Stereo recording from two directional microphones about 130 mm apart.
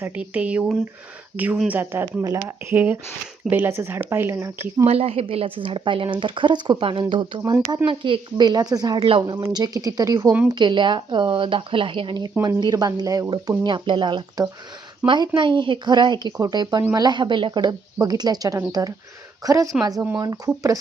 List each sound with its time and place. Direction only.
0.0 s speech: 10° right (ahead or behind)
4.9 s a woman's voice: 50° right (ahead or behind); by 13.6 s 25° right (ahead or behind)
13.7 s speech: 35° right (ahead or behind)